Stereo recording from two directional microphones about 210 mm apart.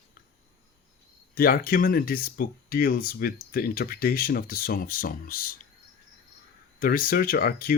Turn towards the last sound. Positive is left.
turn(degrees=45)  # may be behind; listen again after turning